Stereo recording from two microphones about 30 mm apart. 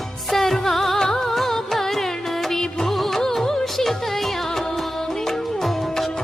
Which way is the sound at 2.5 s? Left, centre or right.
Left.